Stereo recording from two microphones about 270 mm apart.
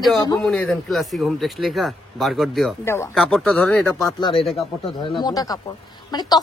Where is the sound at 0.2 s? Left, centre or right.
Centre.